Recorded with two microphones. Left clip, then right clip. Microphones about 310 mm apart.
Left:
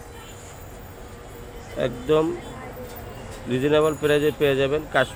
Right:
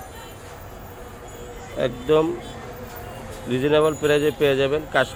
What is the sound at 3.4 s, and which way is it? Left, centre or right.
Speech, centre.